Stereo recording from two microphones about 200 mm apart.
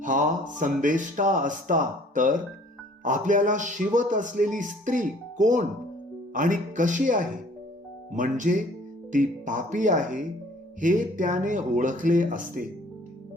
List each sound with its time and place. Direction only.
0.0 s speech: 40° right (ahead or behind)